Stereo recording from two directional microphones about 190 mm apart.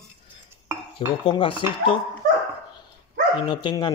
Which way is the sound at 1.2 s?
25° left (ahead or behind).